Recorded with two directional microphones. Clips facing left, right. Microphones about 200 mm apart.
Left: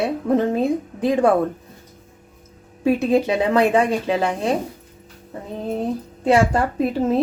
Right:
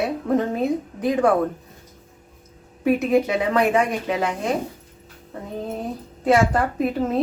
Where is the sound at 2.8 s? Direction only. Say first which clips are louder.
Left 1 dB; 30° left (ahead or behind).